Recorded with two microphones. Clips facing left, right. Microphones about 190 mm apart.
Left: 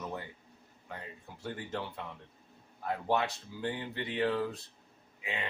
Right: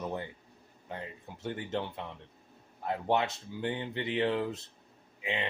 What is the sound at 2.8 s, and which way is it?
A man's voice, 25° right (ahead or behind).